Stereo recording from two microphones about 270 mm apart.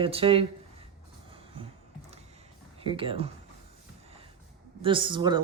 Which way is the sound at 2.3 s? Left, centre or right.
Right.